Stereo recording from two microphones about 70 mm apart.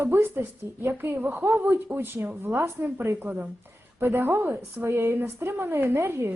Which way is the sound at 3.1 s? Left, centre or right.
Right.